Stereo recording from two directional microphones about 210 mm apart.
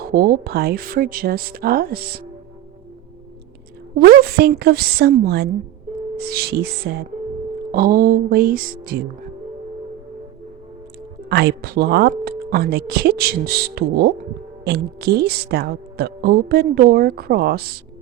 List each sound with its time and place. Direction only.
0.1 s a woman's voice: 45° right (ahead or behind)
4.0 s a woman's voice: 45° right (ahead or behind)
11.3 s a woman's voice: 50° right (ahead or behind)